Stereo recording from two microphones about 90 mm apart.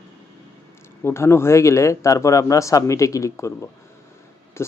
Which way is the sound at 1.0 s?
30° left (ahead or behind).